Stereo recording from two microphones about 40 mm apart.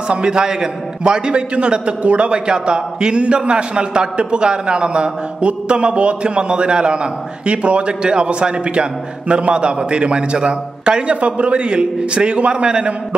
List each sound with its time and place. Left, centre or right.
0.1 s a man's voice: right